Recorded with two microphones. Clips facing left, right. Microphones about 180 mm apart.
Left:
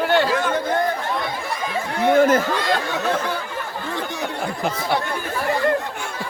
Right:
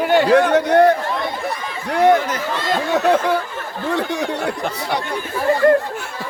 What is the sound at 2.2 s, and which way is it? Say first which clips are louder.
Speech: left 9 dB; 50° left (ahead or behind).